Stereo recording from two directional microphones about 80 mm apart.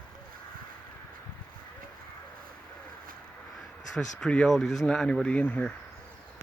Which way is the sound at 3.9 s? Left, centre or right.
Centre.